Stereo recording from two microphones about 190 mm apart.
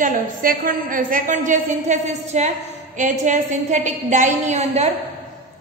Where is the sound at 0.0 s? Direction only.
45° right (ahead or behind).